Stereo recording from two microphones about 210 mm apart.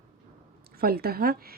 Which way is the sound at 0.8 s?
45° right (ahead or behind).